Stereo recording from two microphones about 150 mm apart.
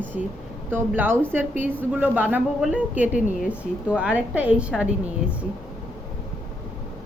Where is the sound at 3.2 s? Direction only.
60° left (ahead or behind).